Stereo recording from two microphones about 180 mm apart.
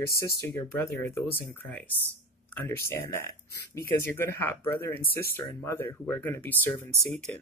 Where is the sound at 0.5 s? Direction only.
15° left (ahead or behind).